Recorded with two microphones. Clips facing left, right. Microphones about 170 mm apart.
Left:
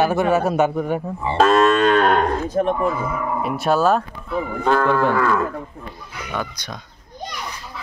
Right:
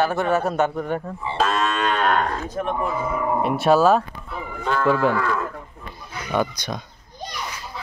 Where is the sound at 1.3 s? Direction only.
50° left (ahead or behind); by 2.7 s 30° left (ahead or behind).